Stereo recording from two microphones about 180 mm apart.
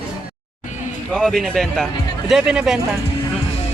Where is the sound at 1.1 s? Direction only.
5° left (ahead or behind).